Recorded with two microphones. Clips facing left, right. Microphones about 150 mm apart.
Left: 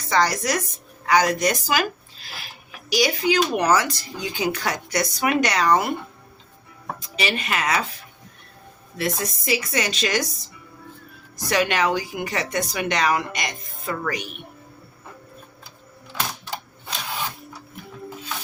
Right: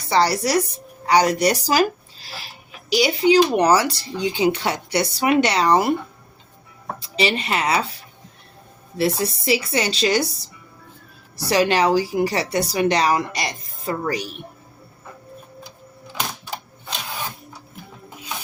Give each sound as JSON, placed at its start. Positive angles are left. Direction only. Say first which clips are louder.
{"t": 0.1, "sound": "speech", "louder": "right 3 dB", "side_deg": -30}
{"t": 7.0, "sound": "a woman's voice", "louder": "right 5 dB", "side_deg": -30}
{"t": 9.0, "sound": "a woman's voice", "louder": "right 5 dB", "side_deg": -30}
{"t": 11.3, "sound": "a woman's voice", "louder": "right 4 dB", "side_deg": -30}